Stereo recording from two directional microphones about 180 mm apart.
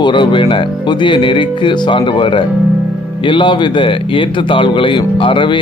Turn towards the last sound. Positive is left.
turn(degrees=25)  # may be behind; listen again after turning